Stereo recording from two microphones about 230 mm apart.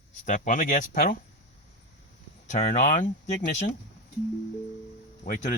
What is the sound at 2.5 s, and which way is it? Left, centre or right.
Speech, left.